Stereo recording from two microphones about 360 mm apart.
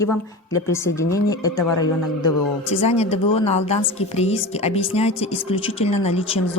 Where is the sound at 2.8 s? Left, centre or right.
Centre.